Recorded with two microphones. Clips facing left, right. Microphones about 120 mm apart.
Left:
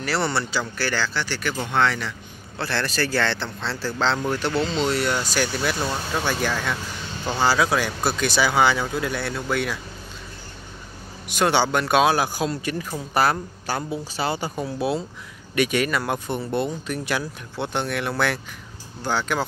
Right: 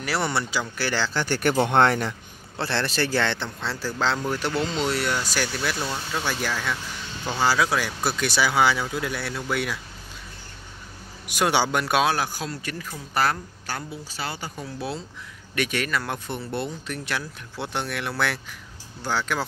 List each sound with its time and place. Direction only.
0.0 s speech: 15° right (ahead or behind)
1.1 s speech: 50° right (ahead or behind)
2.6 s speech: 25° right (ahead or behind); by 9.8 s 5° right (ahead or behind)
11.2 s speech: 10° right (ahead or behind)
12.1 s speech: 10° left (ahead or behind)